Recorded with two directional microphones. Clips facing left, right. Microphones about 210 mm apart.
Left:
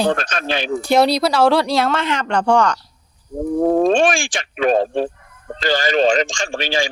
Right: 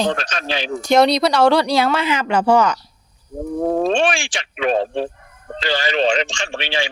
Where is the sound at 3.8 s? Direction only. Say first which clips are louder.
Left 3 dB; 45° left (ahead or behind).